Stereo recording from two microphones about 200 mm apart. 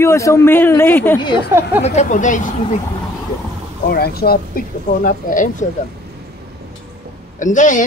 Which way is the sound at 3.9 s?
50° left (ahead or behind).